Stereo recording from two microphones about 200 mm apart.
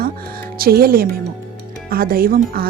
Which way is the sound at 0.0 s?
45° right (ahead or behind).